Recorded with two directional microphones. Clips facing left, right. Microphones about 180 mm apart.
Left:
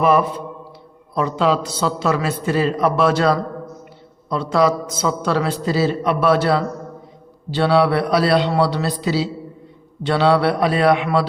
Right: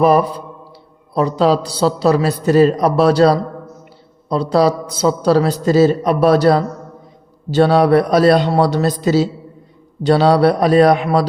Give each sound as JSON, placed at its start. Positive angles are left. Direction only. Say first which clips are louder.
{"t": 0.0, "sound": "a man's voice", "louder": "right 3 dB", "side_deg": -35}